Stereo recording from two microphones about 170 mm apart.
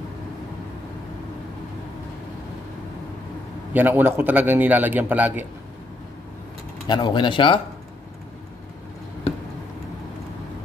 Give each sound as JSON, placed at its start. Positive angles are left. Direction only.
{"t": 3.7, "sound": "a man's voice", "side_deg": -10}
{"t": 6.9, "sound": "speech", "side_deg": 25}